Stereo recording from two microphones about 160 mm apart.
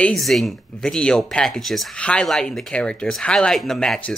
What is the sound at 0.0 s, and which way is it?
Speech, centre (ahead or behind).